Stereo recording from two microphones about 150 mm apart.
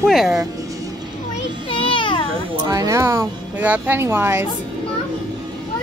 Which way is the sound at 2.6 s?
20° right (ahead or behind).